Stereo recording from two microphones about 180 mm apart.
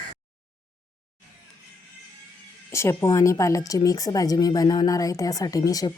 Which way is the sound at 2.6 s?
15° left (ahead or behind).